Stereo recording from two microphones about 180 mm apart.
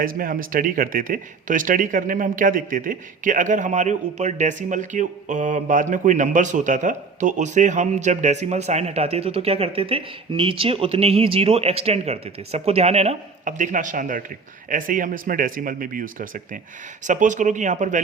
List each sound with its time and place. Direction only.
0.0 s speech: 50° right (ahead or behind)